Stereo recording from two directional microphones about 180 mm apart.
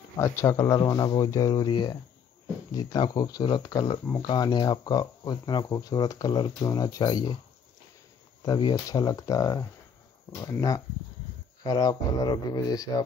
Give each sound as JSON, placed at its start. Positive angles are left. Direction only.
{"t": 0.2, "sound": "speech", "side_deg": 15}
{"t": 8.4, "sound": "speech", "side_deg": 25}